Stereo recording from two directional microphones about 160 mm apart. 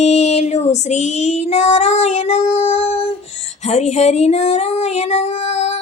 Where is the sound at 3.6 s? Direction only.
45° left (ahead or behind).